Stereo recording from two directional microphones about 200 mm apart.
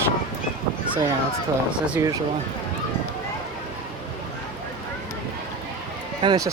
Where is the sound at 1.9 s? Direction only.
15° right (ahead or behind).